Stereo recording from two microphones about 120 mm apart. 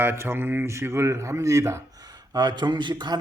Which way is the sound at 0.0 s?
20° right (ahead or behind).